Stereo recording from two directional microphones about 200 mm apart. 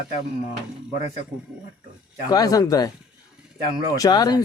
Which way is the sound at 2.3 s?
20° left (ahead or behind).